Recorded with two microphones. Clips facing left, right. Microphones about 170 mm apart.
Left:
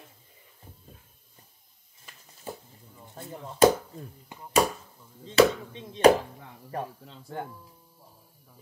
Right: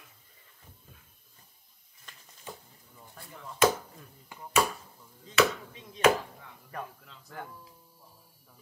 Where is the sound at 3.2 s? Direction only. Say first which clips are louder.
Left 6 dB; 30° left (ahead or behind).